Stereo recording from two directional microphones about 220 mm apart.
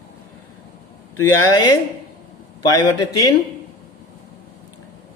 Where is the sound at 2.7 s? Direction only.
15° left (ahead or behind).